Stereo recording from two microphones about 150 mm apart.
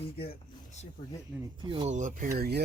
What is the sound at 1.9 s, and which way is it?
Speech, 55° right (ahead or behind).